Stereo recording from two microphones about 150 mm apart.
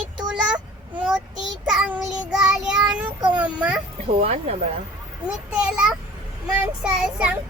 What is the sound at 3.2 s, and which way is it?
Speech, 30° right (ahead or behind).